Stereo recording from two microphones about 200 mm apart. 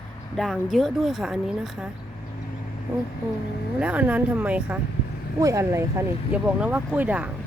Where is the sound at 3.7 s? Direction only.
5° right (ahead or behind).